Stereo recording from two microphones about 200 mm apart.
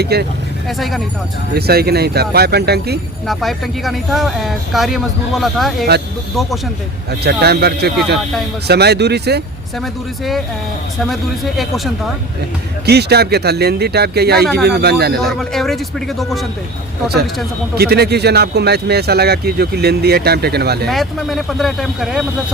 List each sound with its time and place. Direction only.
0.0 s speech: 55° right (ahead or behind)
0.7 s speech: centre (ahead or behind)
1.5 s speech: 50° right (ahead or behind)
3.2 s speech: centre (ahead or behind)
7.1 s speech: 55° right (ahead or behind)
9.8 s speech: centre (ahead or behind)
12.8 s speech: 55° right (ahead or behind)
15.2 s speech: centre (ahead or behind)
17.7 s speech: 55° right (ahead or behind)
20.8 s speech: centre (ahead or behind)